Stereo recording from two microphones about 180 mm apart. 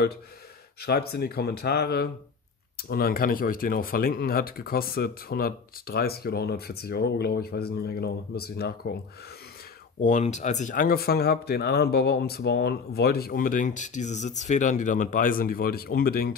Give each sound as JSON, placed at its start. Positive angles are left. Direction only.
{"t": 0.7, "sound": "speech", "side_deg": 60}
{"t": 10.0, "sound": "speech", "side_deg": 40}